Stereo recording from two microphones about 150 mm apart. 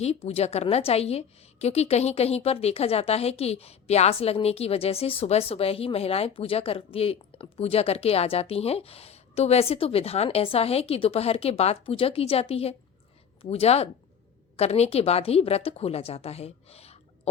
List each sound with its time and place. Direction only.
0.0 s a woman's voice: 45° left (ahead or behind)